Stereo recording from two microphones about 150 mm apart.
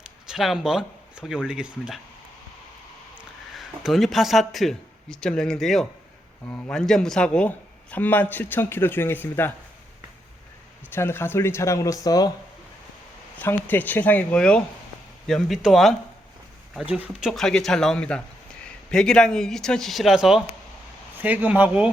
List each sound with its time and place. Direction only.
0.3 s speech: centre (ahead or behind)
3.2 s speech: centre (ahead or behind)
6.4 s a man's voice: 15° left (ahead or behind)
10.9 s a man's voice: 15° left (ahead or behind)
13.4 s a man's voice: 15° left (ahead or behind); by 21.8 s 10° right (ahead or behind)